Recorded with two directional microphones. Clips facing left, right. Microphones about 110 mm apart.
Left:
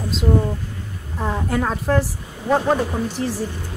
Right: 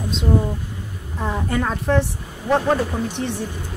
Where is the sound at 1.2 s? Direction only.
5° left (ahead or behind).